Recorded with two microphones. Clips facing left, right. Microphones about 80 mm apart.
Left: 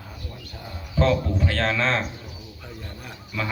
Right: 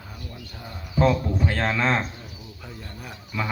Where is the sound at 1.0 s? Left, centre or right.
Centre.